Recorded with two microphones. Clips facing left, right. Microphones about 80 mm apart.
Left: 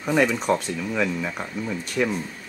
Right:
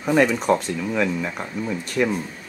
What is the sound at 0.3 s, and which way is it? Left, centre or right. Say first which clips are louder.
Speech: right 3 dB; centre.